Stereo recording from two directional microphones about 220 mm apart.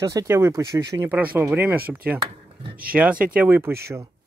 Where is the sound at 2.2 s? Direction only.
25° right (ahead or behind).